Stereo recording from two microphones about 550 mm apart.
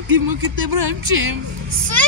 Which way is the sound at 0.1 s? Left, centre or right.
Right.